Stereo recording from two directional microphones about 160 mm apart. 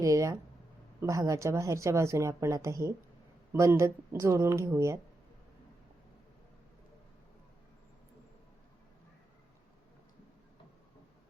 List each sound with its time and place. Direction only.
0.0 s speech: 20° right (ahead or behind)